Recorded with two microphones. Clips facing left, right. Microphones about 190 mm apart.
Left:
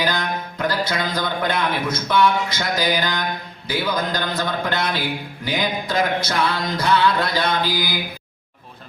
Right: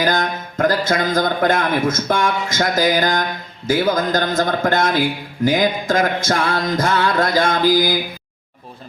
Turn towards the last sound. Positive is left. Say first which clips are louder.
# right 7 dB
turn(degrees=-45)  # may be behind; listen again after turning